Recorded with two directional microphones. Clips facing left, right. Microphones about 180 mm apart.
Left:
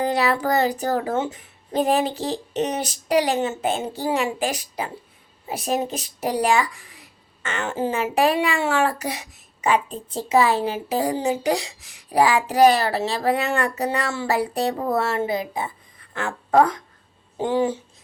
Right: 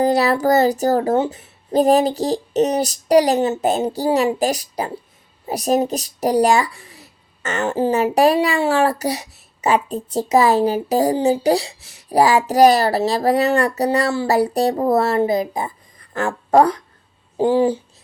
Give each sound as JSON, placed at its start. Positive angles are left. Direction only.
{"t": 0.0, "sound": "speech", "side_deg": -40}